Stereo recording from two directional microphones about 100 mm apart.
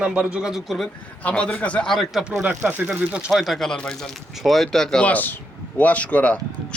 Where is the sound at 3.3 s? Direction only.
Centre (ahead or behind).